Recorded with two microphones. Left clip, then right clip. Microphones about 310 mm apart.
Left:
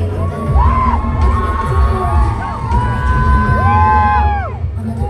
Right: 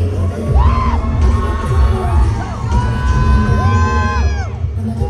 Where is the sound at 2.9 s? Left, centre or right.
Centre.